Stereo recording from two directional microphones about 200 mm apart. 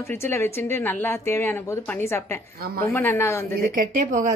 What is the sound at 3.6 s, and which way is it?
Speech, 40° right (ahead or behind).